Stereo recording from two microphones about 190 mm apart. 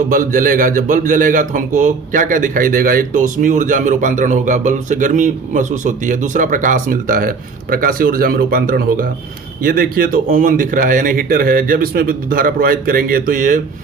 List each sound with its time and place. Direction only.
0.1 s a man's voice: 45° right (ahead or behind)